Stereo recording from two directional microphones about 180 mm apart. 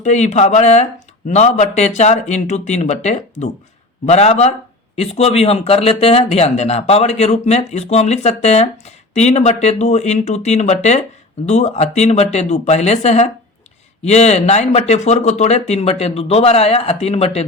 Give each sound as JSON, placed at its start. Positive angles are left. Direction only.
{"t": 0.0, "sound": "speech", "side_deg": 40}